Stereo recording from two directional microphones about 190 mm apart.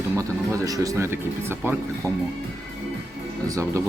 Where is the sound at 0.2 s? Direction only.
15° right (ahead or behind).